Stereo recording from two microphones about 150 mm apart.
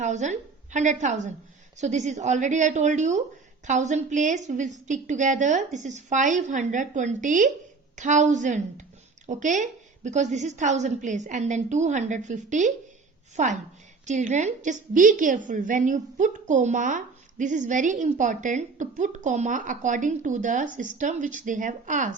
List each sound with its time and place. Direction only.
0.0 s a woman's voice: 50° right (ahead or behind)